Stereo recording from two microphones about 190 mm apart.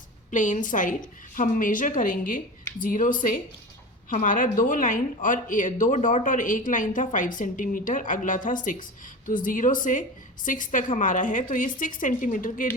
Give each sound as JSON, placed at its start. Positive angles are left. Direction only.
{"t": 0.3, "sound": "speech", "side_deg": 40}